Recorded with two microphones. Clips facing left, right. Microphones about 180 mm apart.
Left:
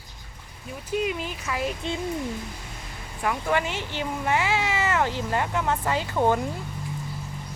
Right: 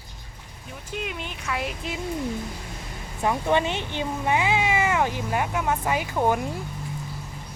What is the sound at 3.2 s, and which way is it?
Speech, 25° right (ahead or behind).